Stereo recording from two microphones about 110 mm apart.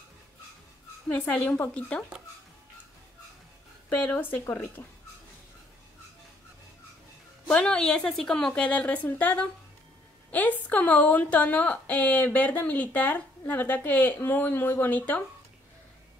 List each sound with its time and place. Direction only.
1.0 s a woman's voice: 15° left (ahead or behind)
4.0 s a woman's voice: 15° left (ahead or behind)
7.4 s a woman's voice: 10° left (ahead or behind)